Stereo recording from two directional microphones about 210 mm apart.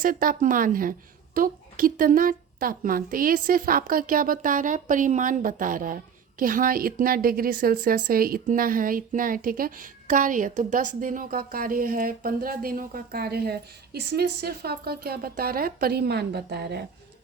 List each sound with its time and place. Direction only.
0.0 s a woman's voice: 40° right (ahead or behind)